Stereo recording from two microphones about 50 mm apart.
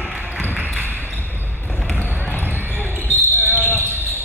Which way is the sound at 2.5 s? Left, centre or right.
Right.